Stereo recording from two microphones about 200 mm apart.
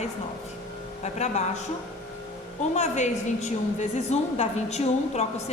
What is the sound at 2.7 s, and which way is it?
A woman's voice, 35° left (ahead or behind).